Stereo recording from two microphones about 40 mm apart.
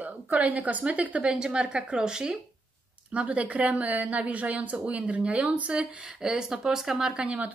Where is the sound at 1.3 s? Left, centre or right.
Right.